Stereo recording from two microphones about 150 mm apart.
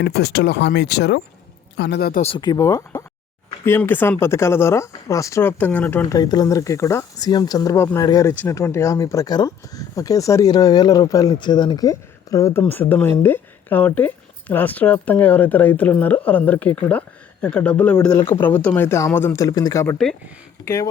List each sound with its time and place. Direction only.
0.1 s speech: 90° left
2.4 s speech: 25° left (ahead or behind)
6.1 s speech: 25° left (ahead or behind)